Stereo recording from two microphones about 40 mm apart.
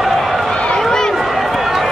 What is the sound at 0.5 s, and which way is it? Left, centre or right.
Run, left.